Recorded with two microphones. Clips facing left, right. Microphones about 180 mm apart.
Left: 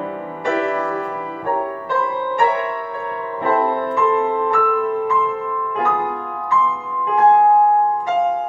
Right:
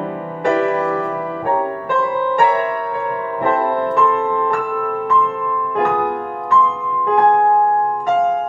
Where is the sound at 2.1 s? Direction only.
55° right (ahead or behind).